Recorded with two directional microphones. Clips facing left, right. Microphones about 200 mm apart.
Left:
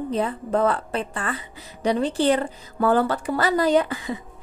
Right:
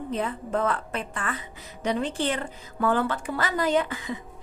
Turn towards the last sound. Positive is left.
turn(degrees=35)  # may be behind; listen again after turning